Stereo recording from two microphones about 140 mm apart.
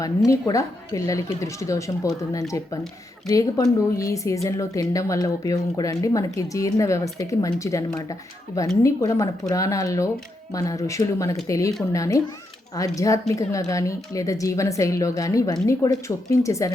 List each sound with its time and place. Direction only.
0.3 s speech: 25° left (ahead or behind)
3.2 s speech: 25° left (ahead or behind)